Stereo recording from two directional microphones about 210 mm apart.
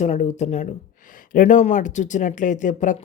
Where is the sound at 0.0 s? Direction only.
35° left (ahead or behind).